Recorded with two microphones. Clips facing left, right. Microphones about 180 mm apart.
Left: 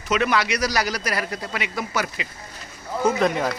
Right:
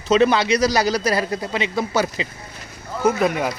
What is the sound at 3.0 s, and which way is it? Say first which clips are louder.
Speech: right 2 dB; 5° right (ahead or behind).